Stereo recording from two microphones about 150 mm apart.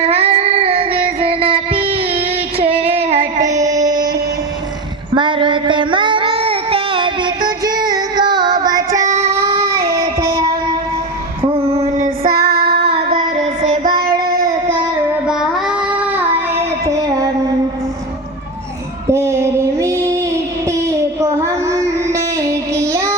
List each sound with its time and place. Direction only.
0.0 s music: 45° right (ahead or behind)
1.9 s a sound: 40° right (ahead or behind)
2.9 s child singing: 45° right (ahead or behind)
3.8 s a sound: 25° right (ahead or behind)
5.1 s child singing: 35° right (ahead or behind)
9.0 s child singing: 50° right (ahead or behind)
9.3 s child singing: 20° right (ahead or behind)
11.5 s female singing: 45° right (ahead or behind)
12.0 s child singing: 85° right
13.2 s music: 50° right (ahead or behind)
14.1 s child singing: 20° right (ahead or behind)
15.3 s child singing: 5° right (ahead or behind)
16.9 s music: 25° right (ahead or behind)
19.1 s female singing: 20° right (ahead or behind)